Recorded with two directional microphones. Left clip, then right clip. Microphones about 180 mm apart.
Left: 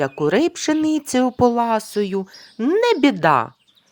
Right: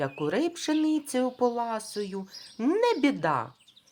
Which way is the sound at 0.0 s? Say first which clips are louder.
Left 10 dB; 40° left (ahead or behind).